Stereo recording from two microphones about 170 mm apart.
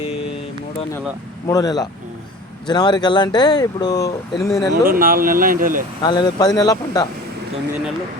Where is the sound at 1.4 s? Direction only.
20° left (ahead or behind).